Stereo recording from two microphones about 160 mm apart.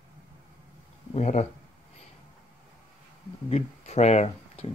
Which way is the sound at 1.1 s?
45° left (ahead or behind).